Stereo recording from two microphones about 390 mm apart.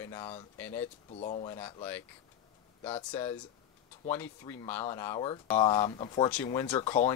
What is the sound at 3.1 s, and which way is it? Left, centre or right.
Speech, centre.